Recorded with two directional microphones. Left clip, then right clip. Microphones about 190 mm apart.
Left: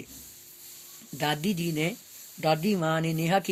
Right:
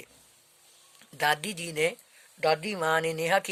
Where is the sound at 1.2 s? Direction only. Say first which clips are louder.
Right 2 dB; 45° right (ahead or behind).